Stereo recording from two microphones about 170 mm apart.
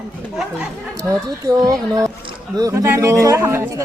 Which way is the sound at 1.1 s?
20° right (ahead or behind).